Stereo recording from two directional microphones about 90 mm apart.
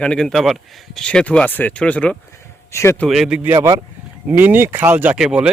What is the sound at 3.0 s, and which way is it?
Speech, 5° right (ahead or behind).